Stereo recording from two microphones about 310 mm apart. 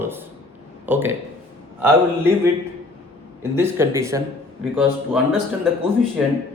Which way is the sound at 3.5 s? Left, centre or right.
Centre.